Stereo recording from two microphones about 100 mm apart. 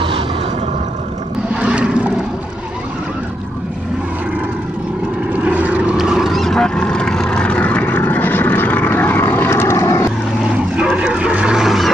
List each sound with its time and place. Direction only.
1.5 s a sound: 10° right (ahead or behind)
5.3 s vehicle: 15° right (ahead or behind); by 10.1 s 30° left (ahead or behind)
10.8 s dog: 10° right (ahead or behind)